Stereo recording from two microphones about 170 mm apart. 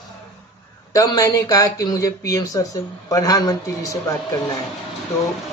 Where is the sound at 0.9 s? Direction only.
20° left (ahead or behind).